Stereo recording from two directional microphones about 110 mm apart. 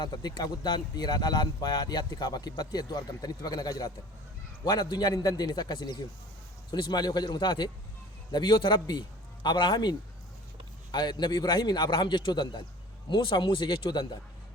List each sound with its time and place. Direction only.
0.0 s a man's voice: 40° left (ahead or behind)
10.9 s speech: 40° left (ahead or behind)